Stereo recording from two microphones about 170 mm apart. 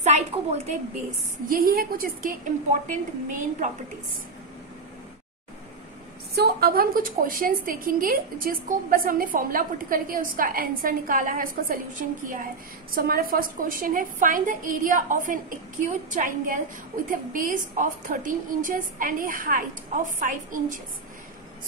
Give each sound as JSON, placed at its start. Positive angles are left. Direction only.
{"t": 0.0, "sound": "a woman's voice", "side_deg": -40}
{"t": 1.5, "sound": "a woman's voice", "side_deg": -60}
{"t": 6.3, "sound": "a woman's voice", "side_deg": -65}